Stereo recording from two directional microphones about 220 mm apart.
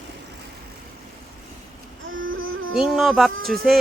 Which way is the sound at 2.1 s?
65° right (ahead or behind).